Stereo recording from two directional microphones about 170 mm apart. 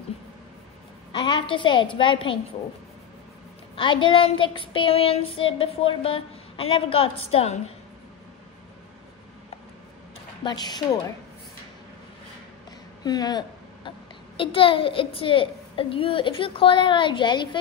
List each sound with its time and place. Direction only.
1.4 s a woman's voice: 30° left (ahead or behind)
3.7 s child singing: 30° left (ahead or behind)
10.4 s a woman's voice: 25° left (ahead or behind)
13.0 s a child's voice: 25° left (ahead or behind)